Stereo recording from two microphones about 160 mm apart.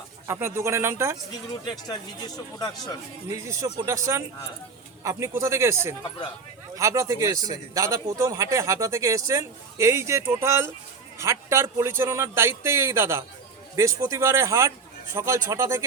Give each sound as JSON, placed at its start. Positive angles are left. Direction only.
{"t": 0.3, "sound": "a man's voice", "side_deg": -15}
{"t": 1.9, "sound": "speech", "side_deg": 25}
{"t": 3.3, "sound": "a man's voice", "side_deg": -20}